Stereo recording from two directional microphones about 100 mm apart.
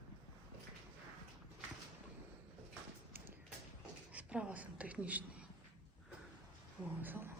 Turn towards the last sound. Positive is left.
turn(degrees=-20)  # may be behind; listen again after turning